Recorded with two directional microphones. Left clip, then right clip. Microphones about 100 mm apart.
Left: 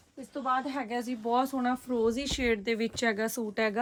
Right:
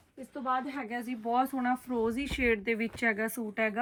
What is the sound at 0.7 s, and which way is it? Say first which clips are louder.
Speech: left 3 dB; 80° left.